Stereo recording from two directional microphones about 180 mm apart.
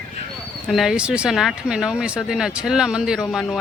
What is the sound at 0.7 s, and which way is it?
Speech, centre (ahead or behind).